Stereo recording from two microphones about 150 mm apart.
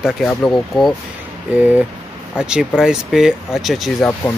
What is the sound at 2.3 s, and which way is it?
Speech, 5° right (ahead or behind).